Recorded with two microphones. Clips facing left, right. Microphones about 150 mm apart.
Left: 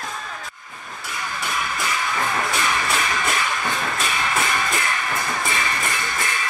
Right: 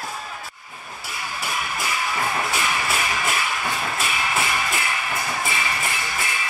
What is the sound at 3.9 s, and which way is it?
Music, 40° left (ahead or behind).